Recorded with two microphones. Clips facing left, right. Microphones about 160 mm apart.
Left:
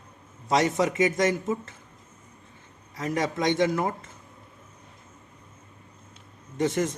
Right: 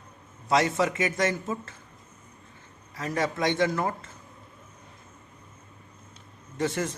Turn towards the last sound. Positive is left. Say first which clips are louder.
# left 3 dB
turn(degrees=20)  # may be behind; listen again after turning